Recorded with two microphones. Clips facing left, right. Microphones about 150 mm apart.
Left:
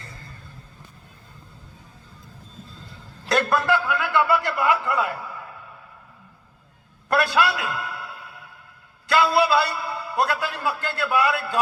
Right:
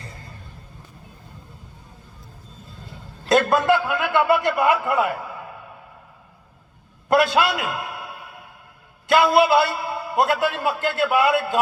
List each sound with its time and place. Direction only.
3.2 s a man's voice: 20° right (ahead or behind)
7.1 s a sound: 20° right (ahead or behind)
9.0 s a man's voice: 20° right (ahead or behind)